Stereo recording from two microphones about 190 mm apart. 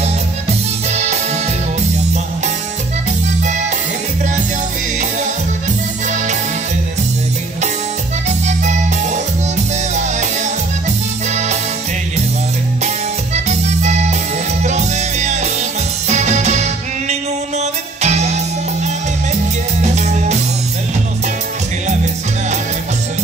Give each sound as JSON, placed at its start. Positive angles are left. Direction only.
{"t": 8.5, "sound": "music", "side_deg": -40}
{"t": 12.8, "sound": "music", "side_deg": -35}
{"t": 19.8, "sound": "music", "side_deg": -40}